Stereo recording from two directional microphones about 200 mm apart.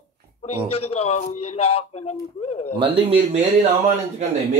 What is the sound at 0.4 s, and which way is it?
A man's voice, 30° left (ahead or behind).